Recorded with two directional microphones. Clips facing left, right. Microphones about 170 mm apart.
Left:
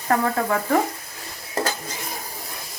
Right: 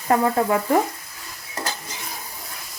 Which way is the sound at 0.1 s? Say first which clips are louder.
Right 2 dB; 25° right (ahead or behind).